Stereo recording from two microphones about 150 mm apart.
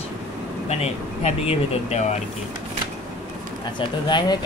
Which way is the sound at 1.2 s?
40° left (ahead or behind).